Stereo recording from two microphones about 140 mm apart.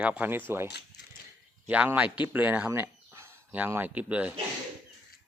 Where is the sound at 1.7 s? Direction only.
10° right (ahead or behind).